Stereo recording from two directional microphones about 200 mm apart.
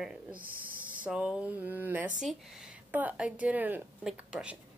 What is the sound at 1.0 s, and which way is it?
A woman's voice, 5° right (ahead or behind).